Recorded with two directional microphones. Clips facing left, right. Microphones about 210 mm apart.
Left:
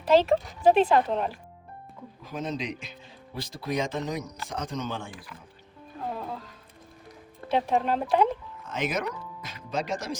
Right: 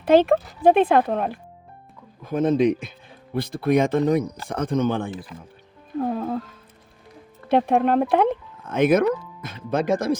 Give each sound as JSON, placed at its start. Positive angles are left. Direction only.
{"t": 0.0, "sound": "speech", "side_deg": -55}
{"t": 5.1, "sound": "speech", "side_deg": -25}
{"t": 6.0, "sound": "music", "side_deg": -55}
{"t": 7.4, "sound": "speech", "side_deg": -55}